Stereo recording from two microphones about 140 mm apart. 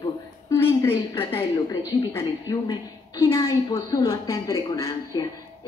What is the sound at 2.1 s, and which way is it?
A woman's voice, 30° left (ahead or behind).